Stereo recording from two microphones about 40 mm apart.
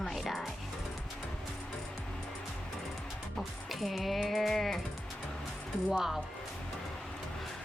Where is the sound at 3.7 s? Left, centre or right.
Centre.